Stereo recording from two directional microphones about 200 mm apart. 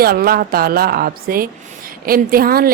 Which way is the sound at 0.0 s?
50° right (ahead or behind).